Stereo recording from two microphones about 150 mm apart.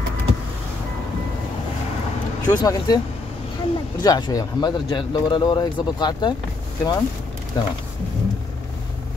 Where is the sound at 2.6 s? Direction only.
30° left (ahead or behind).